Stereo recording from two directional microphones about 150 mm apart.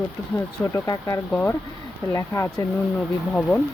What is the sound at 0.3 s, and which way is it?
Speech, 20° left (ahead or behind).